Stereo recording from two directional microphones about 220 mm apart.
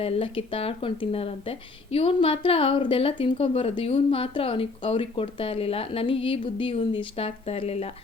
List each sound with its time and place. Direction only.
0.0 s speech: 25° left (ahead or behind)